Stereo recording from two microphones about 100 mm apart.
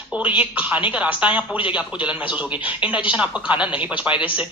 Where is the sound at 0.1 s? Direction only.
15° right (ahead or behind).